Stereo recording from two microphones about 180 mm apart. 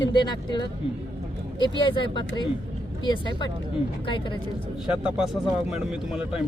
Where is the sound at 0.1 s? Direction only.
25° left (ahead or behind).